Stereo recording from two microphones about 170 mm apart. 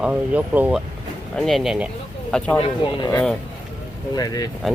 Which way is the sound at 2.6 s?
30° left (ahead or behind).